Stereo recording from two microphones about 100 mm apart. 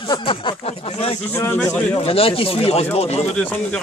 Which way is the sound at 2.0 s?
70° left (ahead or behind).